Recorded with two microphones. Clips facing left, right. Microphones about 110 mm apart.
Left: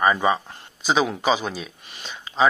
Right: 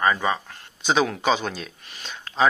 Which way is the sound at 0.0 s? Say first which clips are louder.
Left 3 dB; 15° left (ahead or behind).